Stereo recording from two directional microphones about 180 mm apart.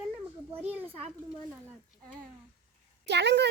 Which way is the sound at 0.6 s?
10° right (ahead or behind).